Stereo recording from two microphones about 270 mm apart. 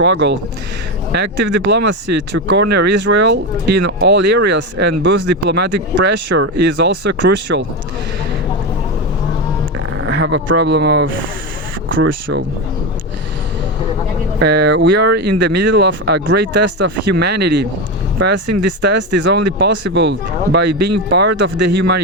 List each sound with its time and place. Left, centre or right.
0.0 s speech: right
1.6 s speech: right
10.0 s speech: right
14.4 s speech: right